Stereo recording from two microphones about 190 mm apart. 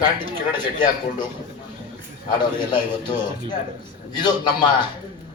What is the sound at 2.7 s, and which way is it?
Speech, 25° left (ahead or behind).